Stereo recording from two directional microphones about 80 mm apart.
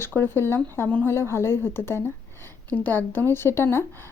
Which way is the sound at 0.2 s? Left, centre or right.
Left.